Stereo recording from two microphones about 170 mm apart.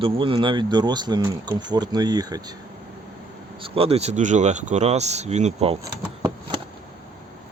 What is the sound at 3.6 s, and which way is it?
Speech, 35° right (ahead or behind).